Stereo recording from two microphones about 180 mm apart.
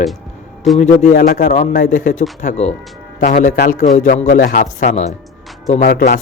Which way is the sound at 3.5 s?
65° left (ahead or behind).